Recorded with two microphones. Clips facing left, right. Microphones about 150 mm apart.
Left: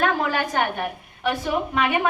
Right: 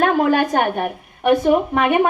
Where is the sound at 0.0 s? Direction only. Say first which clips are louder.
Right 7 dB; 50° right (ahead or behind).